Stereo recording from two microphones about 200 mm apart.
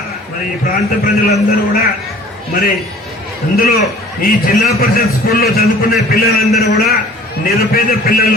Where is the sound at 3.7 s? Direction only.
50° left (ahead or behind).